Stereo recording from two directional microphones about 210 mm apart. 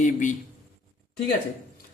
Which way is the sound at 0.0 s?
35° left (ahead or behind).